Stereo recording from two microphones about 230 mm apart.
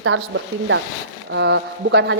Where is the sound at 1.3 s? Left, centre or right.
Right.